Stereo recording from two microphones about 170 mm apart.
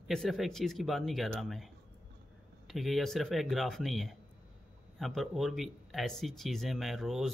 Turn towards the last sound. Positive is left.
turn(degrees=0)  # may be behind; listen again after turning